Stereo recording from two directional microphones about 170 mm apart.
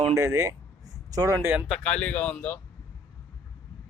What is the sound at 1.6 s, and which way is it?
Speech, 5° left (ahead or behind).